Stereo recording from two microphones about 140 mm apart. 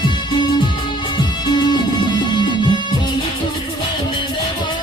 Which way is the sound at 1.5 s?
30° left (ahead or behind).